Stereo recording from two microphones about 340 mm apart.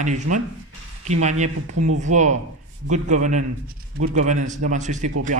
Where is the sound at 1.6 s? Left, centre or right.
Right.